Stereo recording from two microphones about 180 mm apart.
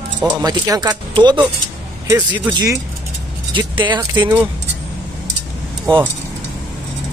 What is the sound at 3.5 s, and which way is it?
Speech, 25° right (ahead or behind).